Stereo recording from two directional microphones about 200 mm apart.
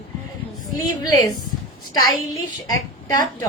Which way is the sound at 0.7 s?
20° left (ahead or behind).